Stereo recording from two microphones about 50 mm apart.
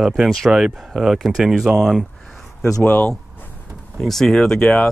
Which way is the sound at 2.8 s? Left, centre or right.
Left.